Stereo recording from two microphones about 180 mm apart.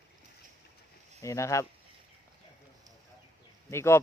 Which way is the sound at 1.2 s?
15° left (ahead or behind).